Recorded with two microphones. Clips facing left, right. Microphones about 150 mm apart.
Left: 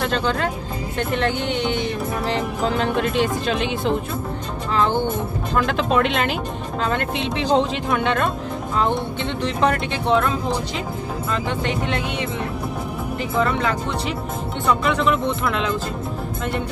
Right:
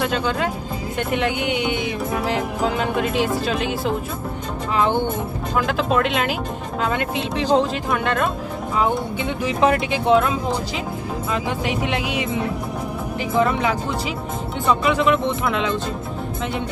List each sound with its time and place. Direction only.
0.0 s speech: 10° right (ahead or behind)
4.7 s speech: 15° right (ahead or behind)
5.6 s speech: 5° right (ahead or behind)
13.4 s speech: 5° right (ahead or behind)